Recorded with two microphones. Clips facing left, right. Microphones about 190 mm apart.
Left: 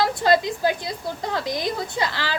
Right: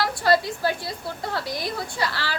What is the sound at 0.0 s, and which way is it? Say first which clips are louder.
A woman's voice: left 2 dB; 20° left (ahead or behind).